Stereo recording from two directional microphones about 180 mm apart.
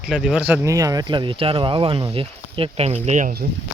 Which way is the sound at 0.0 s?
5° right (ahead or behind).